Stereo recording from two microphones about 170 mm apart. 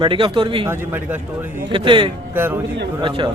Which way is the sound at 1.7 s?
30° right (ahead or behind).